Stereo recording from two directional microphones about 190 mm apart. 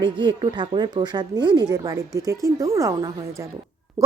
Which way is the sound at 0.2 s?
25° right (ahead or behind).